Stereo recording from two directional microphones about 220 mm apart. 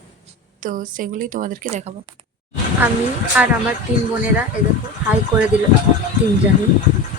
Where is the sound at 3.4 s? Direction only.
10° right (ahead or behind).